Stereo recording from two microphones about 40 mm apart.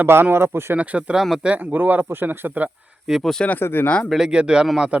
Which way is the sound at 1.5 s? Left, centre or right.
Right.